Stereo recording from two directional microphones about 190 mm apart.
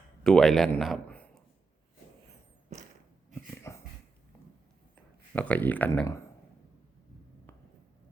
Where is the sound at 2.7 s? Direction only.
40° right (ahead or behind).